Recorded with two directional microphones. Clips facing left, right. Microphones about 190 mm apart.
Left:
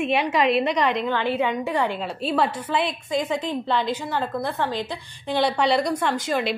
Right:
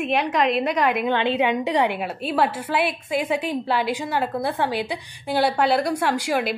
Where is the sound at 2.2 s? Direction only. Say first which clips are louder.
Right 1 dB; 5° right (ahead or behind).